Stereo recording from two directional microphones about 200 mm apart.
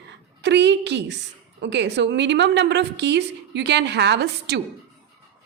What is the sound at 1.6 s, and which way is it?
A woman's voice, 60° right (ahead or behind).